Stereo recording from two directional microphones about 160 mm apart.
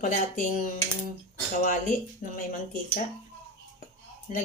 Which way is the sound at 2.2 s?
55° left (ahead or behind).